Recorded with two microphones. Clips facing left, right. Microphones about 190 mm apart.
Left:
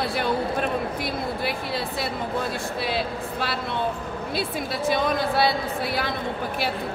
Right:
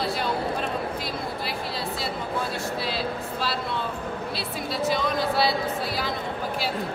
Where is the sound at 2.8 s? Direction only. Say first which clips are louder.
Left 2 dB; 55° left (ahead or behind).